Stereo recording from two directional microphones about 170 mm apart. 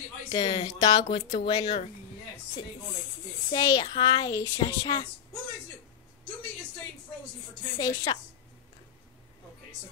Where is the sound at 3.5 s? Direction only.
25° left (ahead or behind).